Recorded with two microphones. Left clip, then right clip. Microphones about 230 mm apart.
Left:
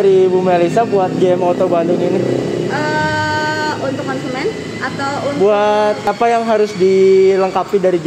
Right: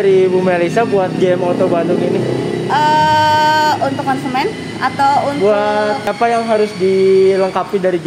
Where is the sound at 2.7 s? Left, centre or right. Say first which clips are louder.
Right 8 dB; right.